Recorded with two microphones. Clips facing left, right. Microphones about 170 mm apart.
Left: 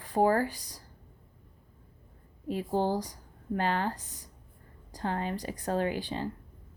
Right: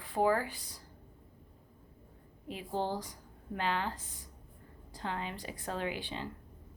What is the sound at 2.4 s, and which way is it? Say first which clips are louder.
A woman's voice: left 7 dB; 40° left (ahead or behind).